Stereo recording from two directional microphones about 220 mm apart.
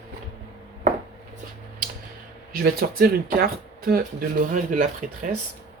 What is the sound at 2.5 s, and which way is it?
Speech, 45° right (ahead or behind).